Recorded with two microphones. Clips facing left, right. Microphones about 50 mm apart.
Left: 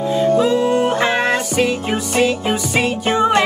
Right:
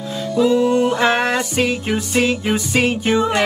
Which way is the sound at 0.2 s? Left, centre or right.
Left.